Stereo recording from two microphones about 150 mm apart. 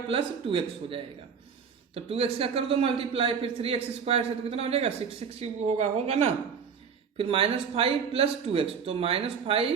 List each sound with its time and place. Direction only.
0.1 s speech: 35° right (ahead or behind)